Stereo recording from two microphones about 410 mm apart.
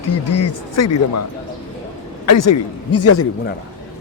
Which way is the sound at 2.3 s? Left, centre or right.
Left.